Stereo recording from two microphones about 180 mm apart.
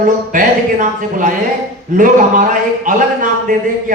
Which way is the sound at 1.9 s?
50° right (ahead or behind).